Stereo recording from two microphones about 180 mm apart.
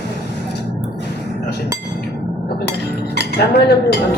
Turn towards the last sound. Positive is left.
turn(degrees=65)  # may be behind; listen again after turning